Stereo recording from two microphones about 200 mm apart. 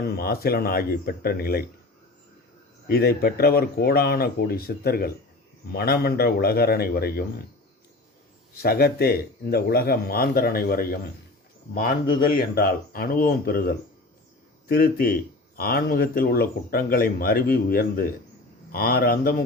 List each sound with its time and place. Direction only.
0.0 s speech: 50° left (ahead or behind)
2.9 s speech: 50° left (ahead or behind)
8.6 s speech: 50° left (ahead or behind)